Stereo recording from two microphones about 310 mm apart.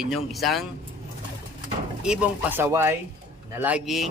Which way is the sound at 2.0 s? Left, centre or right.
Centre.